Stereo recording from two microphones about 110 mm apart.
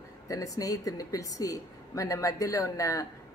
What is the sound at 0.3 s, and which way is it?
Speech, 30° left (ahead or behind).